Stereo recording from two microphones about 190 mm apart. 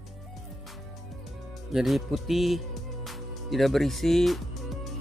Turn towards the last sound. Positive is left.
turn(degrees=0)  # may be behind; listen again after turning